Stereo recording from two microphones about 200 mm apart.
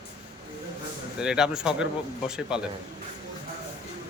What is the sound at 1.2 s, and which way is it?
A man's voice, 5° right (ahead or behind).